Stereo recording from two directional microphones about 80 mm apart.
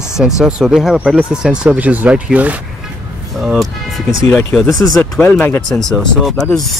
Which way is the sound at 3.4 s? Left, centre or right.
Centre.